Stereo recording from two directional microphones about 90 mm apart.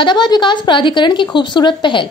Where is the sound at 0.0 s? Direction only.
55° left (ahead or behind).